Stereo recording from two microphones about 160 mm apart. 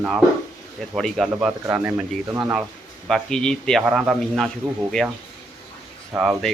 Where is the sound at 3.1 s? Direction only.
5° left (ahead or behind).